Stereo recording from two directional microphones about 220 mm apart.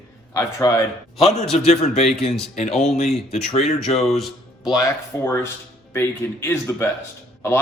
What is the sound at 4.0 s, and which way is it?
Speech, centre (ahead or behind).